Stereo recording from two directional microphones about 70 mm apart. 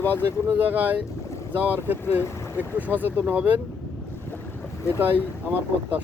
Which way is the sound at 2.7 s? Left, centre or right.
Right.